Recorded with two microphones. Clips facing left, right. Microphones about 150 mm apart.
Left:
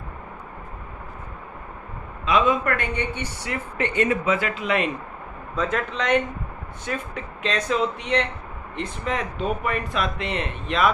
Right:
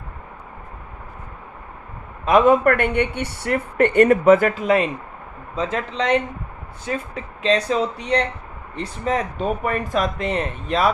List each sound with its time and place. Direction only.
2.2 s speech: 50° right (ahead or behind)
5.5 s speech: 25° right (ahead or behind)